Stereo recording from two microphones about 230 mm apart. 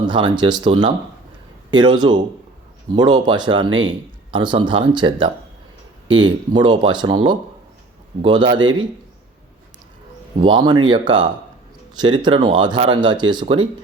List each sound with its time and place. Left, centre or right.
0.1 s speech: centre
10.4 s speech: centre